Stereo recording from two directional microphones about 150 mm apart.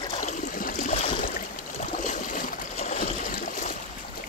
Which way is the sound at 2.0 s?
60° left (ahead or behind).